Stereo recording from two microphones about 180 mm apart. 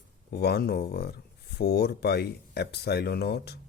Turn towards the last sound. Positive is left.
turn(degrees=65)  # may be behind; listen again after turning